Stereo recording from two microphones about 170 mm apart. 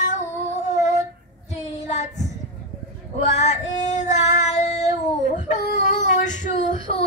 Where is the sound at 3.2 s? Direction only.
40° left (ahead or behind).